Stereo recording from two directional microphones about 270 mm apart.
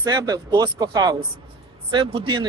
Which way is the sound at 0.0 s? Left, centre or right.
Centre.